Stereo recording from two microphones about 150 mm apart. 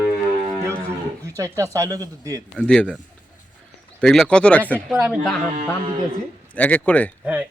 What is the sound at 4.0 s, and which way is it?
Speech, 5° left (ahead or behind).